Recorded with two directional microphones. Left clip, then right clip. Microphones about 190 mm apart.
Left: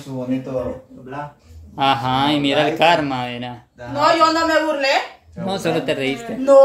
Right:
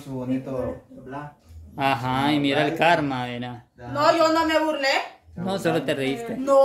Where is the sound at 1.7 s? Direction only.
Centre (ahead or behind).